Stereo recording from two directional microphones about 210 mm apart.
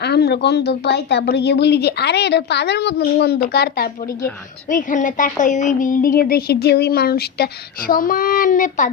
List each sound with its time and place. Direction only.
0.0 s a woman's voice: 50° left (ahead or behind)